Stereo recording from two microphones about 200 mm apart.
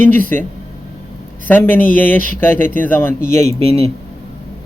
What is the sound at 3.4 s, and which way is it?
Speech, 30° right (ahead or behind).